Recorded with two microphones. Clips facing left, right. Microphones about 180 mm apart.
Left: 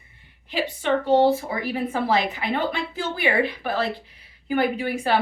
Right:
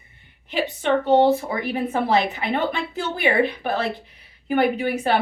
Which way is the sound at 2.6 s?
65° right (ahead or behind).